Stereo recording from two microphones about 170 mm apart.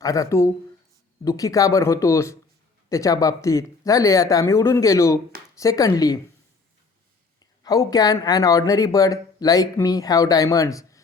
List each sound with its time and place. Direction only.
0.0 s speech: 20° left (ahead or behind)
7.6 s speech: 20° left (ahead or behind)